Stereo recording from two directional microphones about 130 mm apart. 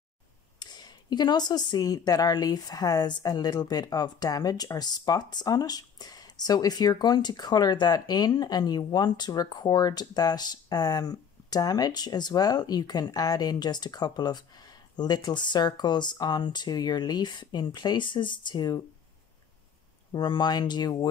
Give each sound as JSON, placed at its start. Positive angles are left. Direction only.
{"t": 0.6, "sound": "speech", "side_deg": 35}
{"t": 20.1, "sound": "speech", "side_deg": 35}